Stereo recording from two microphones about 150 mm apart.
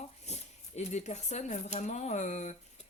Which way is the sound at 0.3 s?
50° left (ahead or behind).